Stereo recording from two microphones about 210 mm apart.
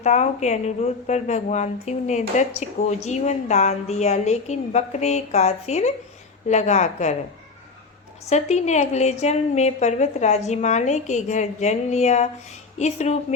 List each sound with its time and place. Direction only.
0.0 s a woman's voice: 35° left (ahead or behind)
8.3 s a woman's voice: 30° left (ahead or behind)